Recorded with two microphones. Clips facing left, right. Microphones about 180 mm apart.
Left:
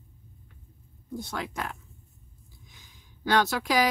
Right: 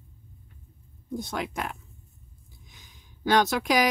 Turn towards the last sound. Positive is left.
turn(degrees=-15)  # may be behind; listen again after turning